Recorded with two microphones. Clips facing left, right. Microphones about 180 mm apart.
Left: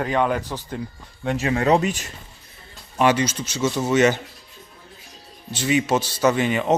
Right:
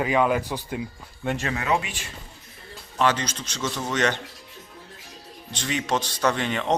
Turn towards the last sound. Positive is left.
turn(degrees=10)  # may be behind; listen again after turning